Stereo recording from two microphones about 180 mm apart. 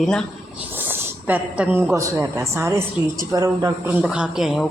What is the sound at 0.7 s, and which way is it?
A woman's voice, 10° right (ahead or behind).